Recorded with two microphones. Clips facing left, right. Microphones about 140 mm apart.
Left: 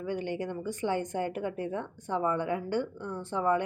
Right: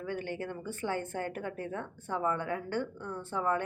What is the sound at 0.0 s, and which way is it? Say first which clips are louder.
A woman's voice: left 4 dB; 15° left (ahead or behind).